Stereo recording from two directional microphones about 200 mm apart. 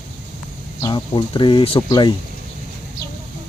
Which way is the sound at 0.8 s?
25° left (ahead or behind).